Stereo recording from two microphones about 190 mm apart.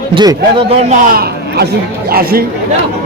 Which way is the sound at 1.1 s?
55° right (ahead or behind).